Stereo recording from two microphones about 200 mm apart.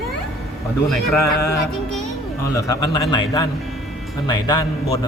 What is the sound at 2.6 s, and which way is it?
A man's voice, 20° left (ahead or behind).